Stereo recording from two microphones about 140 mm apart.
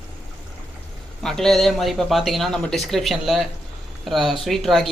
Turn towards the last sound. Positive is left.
turn(degrees=0)  # may be behind; listen again after turning